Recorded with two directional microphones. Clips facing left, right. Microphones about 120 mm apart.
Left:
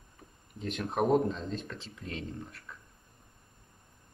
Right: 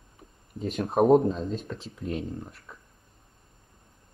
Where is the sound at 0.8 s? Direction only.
30° right (ahead or behind).